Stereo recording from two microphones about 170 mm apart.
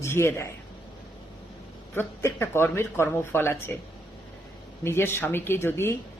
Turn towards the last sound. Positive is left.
turn(degrees=15)  # may be behind; listen again after turning